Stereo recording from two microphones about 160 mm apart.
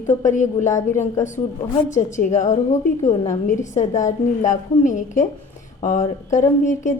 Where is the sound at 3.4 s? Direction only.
50° left (ahead or behind).